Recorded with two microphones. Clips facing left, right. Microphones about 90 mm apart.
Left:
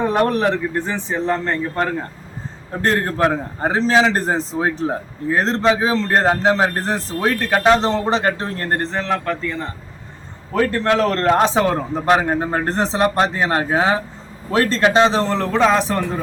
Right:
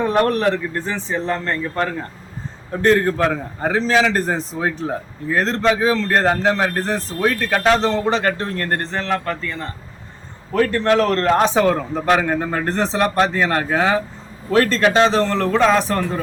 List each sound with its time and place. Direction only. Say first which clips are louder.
0.0 s a man's voice: even; 15° left (ahead or behind)
2.8 s a man's voice: right 2 dB; 30° left (ahead or behind)
9.0 s a man's voice: left 1 dB; 5° left (ahead or behind)
10.7 s a man's voice: right 1 dB; 30° left (ahead or behind); by 16.0 s 15° left (ahead or behind)